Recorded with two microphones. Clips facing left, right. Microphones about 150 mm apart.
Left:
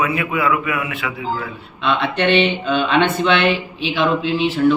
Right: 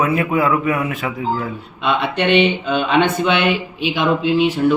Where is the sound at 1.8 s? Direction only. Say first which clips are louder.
Even; 10° right (ahead or behind).